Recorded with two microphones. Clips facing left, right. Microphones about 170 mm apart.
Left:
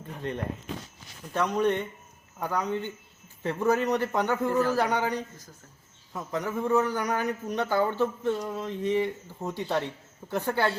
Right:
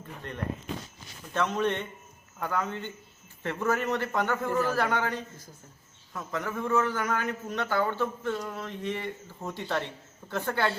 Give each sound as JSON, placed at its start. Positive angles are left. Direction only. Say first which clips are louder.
{"t": 1.3, "sound": "a man's voice", "louder": "left 2 dB", "side_deg": 15}